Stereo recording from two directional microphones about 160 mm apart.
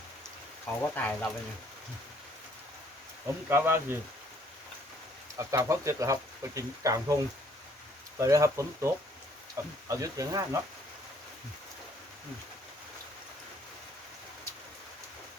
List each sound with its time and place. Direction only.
0.8 s speech: 10° left (ahead or behind)
3.5 s speech: 15° right (ahead or behind)
5.4 s speech: 20° right (ahead or behind)
8.2 s speech: 20° right (ahead or behind)